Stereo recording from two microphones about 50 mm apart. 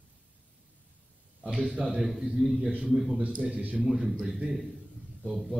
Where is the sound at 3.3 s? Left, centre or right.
Right.